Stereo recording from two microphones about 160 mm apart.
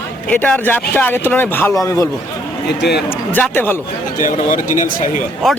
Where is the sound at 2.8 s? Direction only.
90° left.